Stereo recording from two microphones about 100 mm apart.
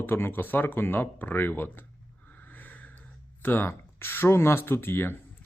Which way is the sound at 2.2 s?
20° left (ahead or behind).